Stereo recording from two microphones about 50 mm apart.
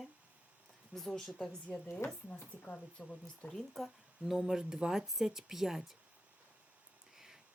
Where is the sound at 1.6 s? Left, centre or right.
Left.